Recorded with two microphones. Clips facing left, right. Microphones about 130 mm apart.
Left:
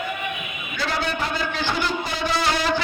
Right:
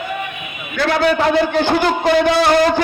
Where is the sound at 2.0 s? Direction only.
70° right (ahead or behind).